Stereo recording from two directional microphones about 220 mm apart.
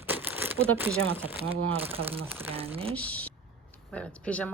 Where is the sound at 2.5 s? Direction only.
25° right (ahead or behind).